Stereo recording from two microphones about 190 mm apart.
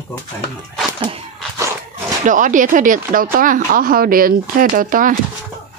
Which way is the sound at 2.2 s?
45° right (ahead or behind).